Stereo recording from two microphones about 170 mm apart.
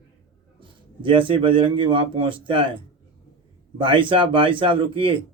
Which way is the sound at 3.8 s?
30° right (ahead or behind).